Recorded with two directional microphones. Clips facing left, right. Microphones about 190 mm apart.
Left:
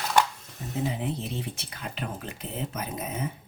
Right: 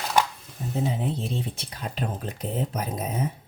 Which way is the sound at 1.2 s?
35° right (ahead or behind).